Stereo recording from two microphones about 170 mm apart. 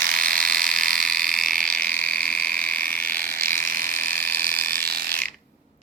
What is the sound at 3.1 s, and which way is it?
Frog, 60° right (ahead or behind).